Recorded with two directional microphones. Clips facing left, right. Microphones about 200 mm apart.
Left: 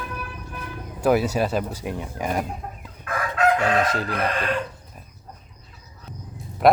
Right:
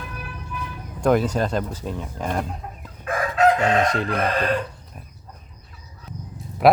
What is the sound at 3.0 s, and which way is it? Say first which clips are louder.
Chicken: right 3 dB; 25° right (ahead or behind).